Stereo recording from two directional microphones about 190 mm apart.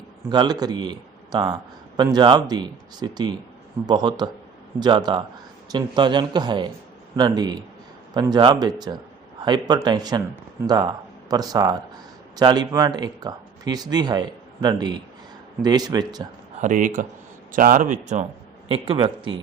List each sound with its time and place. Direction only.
0.3 s speech: 20° right (ahead or behind)
16.6 s speech: 40° right (ahead or behind)
18.7 s speech: 30° right (ahead or behind)